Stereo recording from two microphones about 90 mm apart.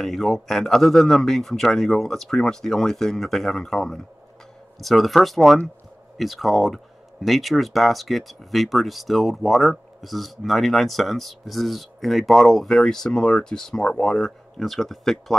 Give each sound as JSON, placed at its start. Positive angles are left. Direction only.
{"t": 0.0, "sound": "speech", "side_deg": 0}